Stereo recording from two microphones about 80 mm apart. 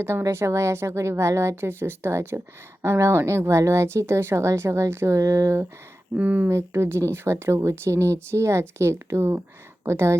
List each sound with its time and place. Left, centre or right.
0.0 s speech: right
6.1 s speech: centre
6.5 s speech: right